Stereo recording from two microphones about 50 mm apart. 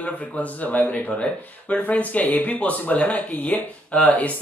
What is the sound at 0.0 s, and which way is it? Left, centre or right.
Speech, left.